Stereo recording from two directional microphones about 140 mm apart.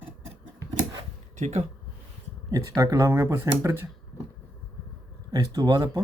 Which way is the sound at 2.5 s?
25° right (ahead or behind).